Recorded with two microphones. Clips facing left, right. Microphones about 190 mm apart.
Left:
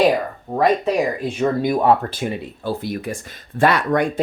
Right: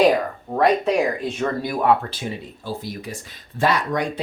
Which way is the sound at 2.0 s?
55° left (ahead or behind).